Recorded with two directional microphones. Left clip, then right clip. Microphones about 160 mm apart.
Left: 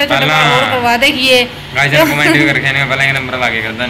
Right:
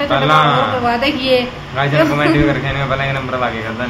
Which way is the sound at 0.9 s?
15° left (ahead or behind).